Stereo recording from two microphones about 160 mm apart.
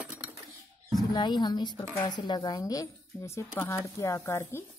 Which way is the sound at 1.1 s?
30° left (ahead or behind).